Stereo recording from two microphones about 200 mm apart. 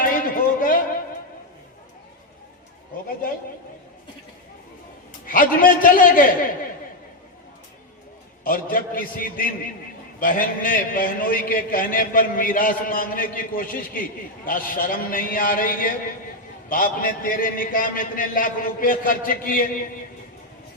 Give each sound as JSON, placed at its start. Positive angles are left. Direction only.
{"t": 0.0, "sound": "a sound", "side_deg": 45}
{"t": 5.2, "sound": "a man's voice", "side_deg": 45}
{"t": 8.4, "sound": "a man's voice", "side_deg": 45}